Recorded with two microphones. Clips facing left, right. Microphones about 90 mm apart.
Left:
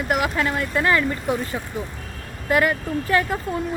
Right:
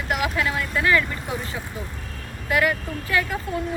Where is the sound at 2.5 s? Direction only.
35° left (ahead or behind).